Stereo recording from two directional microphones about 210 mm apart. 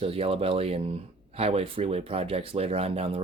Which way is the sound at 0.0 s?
25° right (ahead or behind).